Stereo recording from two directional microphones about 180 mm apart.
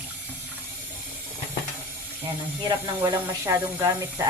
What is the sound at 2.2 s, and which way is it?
Speech, 20° right (ahead or behind).